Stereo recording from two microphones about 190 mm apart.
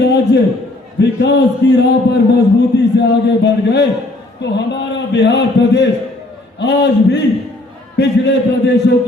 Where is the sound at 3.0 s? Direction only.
60° left (ahead or behind).